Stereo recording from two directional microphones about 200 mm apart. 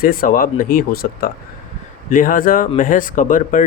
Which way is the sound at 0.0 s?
45° left (ahead or behind).